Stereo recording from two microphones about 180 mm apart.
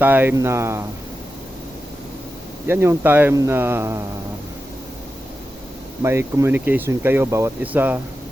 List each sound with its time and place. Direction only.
0.0 s speech: 10° right (ahead or behind)
2.6 s speech: 15° right (ahead or behind)
6.0 s speech: 15° right (ahead or behind)